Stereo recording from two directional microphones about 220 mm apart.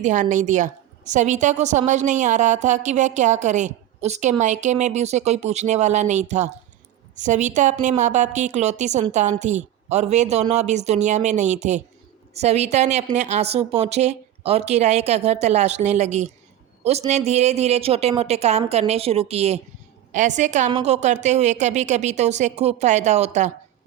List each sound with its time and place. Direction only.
0.0 s a woman's voice: 35° right (ahead or behind)